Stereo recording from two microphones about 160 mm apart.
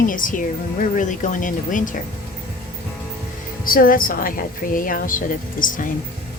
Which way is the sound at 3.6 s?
60° left (ahead or behind).